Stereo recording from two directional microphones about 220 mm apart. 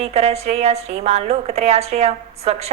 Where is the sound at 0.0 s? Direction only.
30° right (ahead or behind).